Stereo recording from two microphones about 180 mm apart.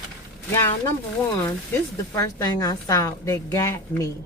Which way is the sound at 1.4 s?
15° left (ahead or behind).